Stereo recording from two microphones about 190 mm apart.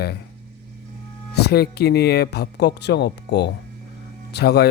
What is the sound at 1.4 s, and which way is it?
Speech, 60° left (ahead or behind).